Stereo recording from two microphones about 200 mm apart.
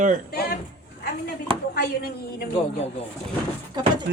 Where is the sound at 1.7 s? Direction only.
50° left (ahead or behind).